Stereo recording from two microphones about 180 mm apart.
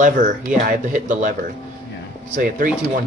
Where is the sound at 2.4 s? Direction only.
50° right (ahead or behind).